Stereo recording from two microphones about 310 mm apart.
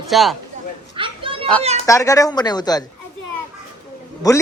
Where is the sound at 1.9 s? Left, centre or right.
Centre.